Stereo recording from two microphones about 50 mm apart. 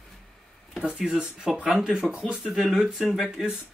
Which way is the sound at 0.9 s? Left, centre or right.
Centre.